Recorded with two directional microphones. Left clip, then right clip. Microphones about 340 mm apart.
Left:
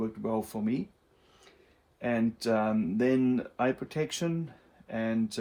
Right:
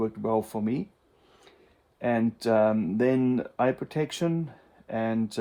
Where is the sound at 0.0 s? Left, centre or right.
Right.